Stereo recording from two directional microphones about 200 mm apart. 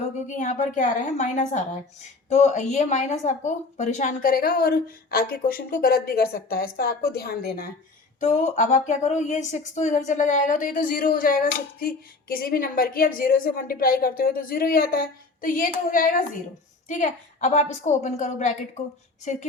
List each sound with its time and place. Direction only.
0.3 s a woman's voice: 40° left (ahead or behind)
8.2 s a woman's voice: 35° left (ahead or behind)